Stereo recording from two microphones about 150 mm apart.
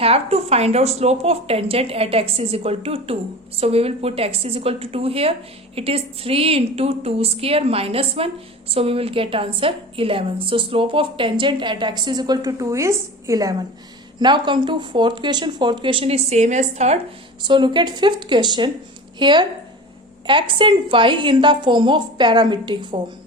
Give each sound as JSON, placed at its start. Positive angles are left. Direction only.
{"t": 0.0, "sound": "a woman's voice", "side_deg": -40}
{"t": 17.4, "sound": "a woman's voice", "side_deg": -30}